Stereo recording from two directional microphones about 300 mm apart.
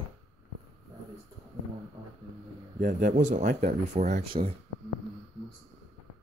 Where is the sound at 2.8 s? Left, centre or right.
Right.